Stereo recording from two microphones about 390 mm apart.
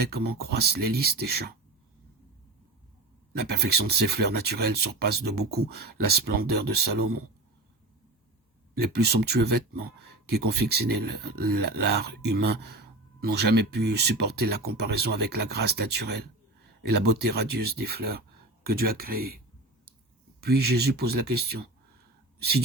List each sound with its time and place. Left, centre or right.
0.0 s speech: right
3.3 s speech: right
8.8 s speech: right
20.4 s speech: right